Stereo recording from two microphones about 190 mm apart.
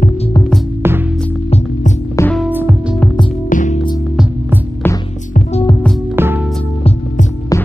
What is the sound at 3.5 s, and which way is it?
Music, 40° left (ahead or behind).